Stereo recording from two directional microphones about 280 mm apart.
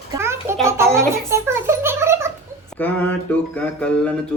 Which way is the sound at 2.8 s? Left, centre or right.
Centre.